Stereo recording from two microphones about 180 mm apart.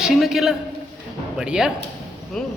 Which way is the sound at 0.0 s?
Centre (ahead or behind).